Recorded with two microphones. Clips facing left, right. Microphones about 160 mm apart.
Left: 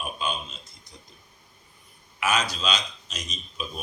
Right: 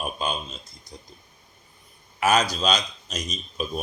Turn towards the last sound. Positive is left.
turn(degrees=-40)  # may be behind; listen again after turning